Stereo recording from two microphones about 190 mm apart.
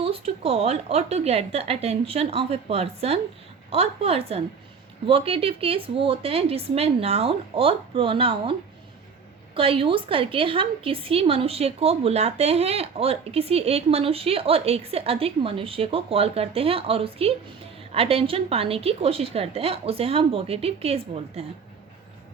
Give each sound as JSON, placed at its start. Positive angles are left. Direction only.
{"t": 0.0, "sound": "a woman's voice", "side_deg": -30}
{"t": 9.6, "sound": "a woman's voice", "side_deg": -30}